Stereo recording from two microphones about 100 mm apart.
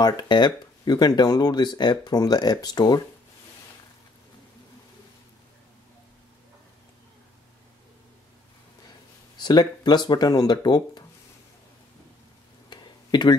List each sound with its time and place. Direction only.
0.0 s speech: 45° left (ahead or behind)
9.4 s speech: 45° left (ahead or behind)
12.6 s a sound: 45° left (ahead or behind)